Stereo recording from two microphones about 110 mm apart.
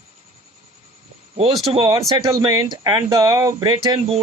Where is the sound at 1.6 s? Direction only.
55° right (ahead or behind).